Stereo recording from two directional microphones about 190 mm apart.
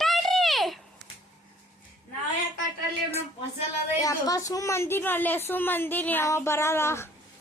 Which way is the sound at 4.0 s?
20° left (ahead or behind).